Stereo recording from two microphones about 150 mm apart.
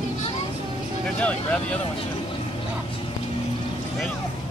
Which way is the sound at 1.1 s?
10° left (ahead or behind).